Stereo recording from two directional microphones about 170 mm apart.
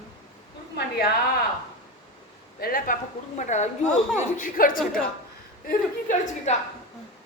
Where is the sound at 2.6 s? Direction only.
60° left (ahead or behind).